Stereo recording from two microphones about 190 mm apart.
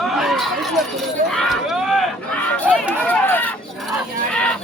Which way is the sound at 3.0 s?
10° left (ahead or behind).